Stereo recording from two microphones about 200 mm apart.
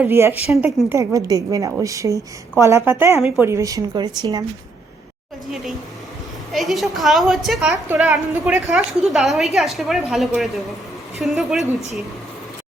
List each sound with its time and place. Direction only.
0.0 s speech: 10° right (ahead or behind)
6.5 s a woman's voice: centre (ahead or behind)